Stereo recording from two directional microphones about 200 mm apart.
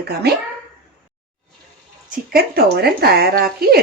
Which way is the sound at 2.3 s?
50° right (ahead or behind).